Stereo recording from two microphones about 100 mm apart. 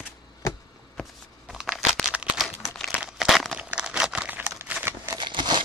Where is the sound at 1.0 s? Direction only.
5° right (ahead or behind).